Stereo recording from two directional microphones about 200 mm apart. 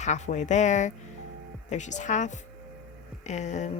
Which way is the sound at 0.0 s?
35° left (ahead or behind).